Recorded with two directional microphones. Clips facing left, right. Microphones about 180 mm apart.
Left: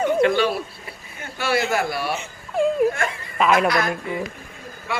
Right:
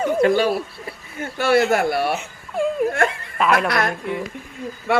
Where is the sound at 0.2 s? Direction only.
45° right (ahead or behind).